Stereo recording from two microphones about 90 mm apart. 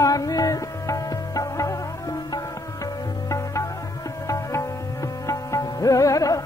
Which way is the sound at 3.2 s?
35° left (ahead or behind).